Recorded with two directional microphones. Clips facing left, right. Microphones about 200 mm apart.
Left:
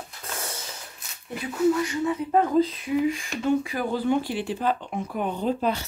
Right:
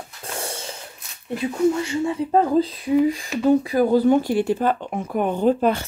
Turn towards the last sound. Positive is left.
turn(degrees=-55)  # may be behind; listen again after turning